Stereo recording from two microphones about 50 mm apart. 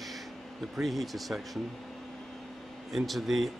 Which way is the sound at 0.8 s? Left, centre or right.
Centre.